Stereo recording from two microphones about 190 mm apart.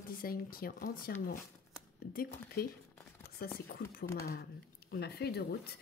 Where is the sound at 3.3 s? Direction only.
55° left (ahead or behind).